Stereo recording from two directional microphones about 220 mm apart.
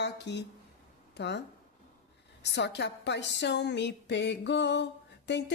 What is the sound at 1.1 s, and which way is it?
Speech, 50° left (ahead or behind).